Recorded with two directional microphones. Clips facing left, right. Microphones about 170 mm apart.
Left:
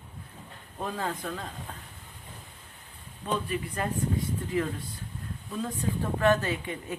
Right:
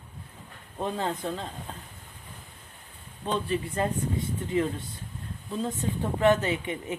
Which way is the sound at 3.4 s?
25° right (ahead or behind).